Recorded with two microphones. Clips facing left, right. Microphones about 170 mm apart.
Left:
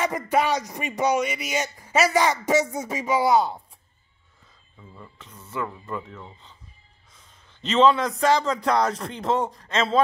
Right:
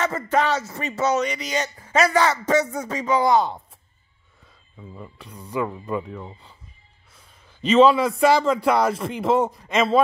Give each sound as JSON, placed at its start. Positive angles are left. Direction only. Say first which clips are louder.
{"t": 0.0, "sound": "speech", "louder": "right 1 dB", "side_deg": 10}
{"t": 4.7, "sound": "speech", "louder": "right 6 dB", "side_deg": -15}
{"t": 7.6, "sound": "speech", "louder": "right 4 dB", "side_deg": -10}